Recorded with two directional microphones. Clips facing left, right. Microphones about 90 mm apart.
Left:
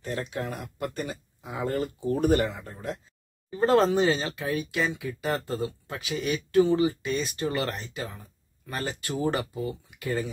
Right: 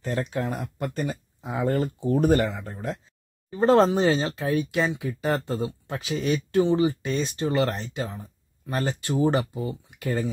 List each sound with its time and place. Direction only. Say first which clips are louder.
0.0 s speech: right 4 dB; 40° right (ahead or behind)